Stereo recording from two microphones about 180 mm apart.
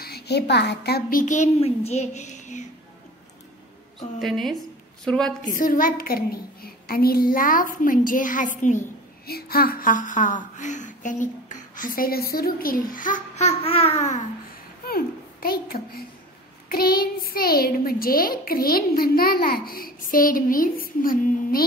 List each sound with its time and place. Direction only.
0.0 s a child's voice: 65° left (ahead or behind)
1.2 s a child's voice: 40° left (ahead or behind)
4.2 s a woman's voice: centre (ahead or behind)
5.6 s a woman's voice: 50° left (ahead or behind)
9.3 s a woman's voice: 60° left (ahead or behind); by 14.2 s 40° left (ahead or behind)
14.9 s a child's voice: 55° left (ahead or behind)